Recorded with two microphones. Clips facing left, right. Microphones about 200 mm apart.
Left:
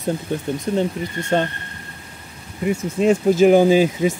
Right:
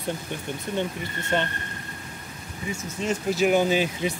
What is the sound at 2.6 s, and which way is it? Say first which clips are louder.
Speech: left 12 dB; 60° left (ahead or behind).